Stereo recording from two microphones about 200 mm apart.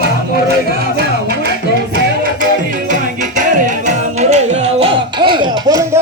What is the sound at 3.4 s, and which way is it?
Music, 40° right (ahead or behind).